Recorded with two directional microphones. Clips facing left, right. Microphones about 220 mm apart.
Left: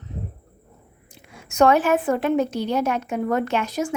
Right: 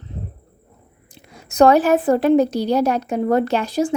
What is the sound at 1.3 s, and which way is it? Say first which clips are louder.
A woman's voice: right 4 dB; 35° right (ahead or behind).